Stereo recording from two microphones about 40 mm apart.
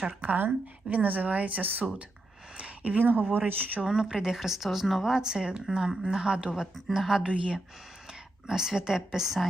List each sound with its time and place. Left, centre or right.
0.2 s speech: right
2.6 s a sound: right
3.3 s speech: right
3.8 s a woman's voice: centre
5.2 s a woman's voice: centre
6.7 s speech: centre
7.3 s speech: right
8.4 s a woman's voice: centre